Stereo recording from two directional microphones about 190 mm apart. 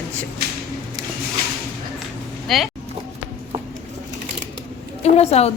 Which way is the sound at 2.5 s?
Centre (ahead or behind).